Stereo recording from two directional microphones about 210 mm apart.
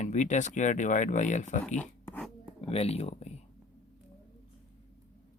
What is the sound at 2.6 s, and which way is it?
Speech, 30° left (ahead or behind).